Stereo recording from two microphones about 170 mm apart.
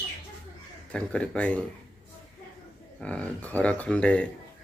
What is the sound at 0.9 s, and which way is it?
Speech, 5° left (ahead or behind).